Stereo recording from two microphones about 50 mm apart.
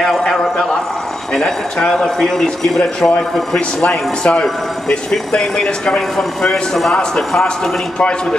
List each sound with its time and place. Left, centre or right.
0.0 s a man's voice: centre